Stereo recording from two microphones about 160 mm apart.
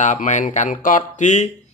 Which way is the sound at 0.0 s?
50° left (ahead or behind).